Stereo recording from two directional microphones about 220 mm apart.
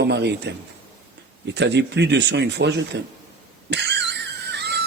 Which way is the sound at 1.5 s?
50° right (ahead or behind).